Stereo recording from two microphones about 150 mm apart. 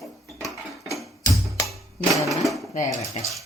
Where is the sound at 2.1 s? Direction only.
Centre (ahead or behind).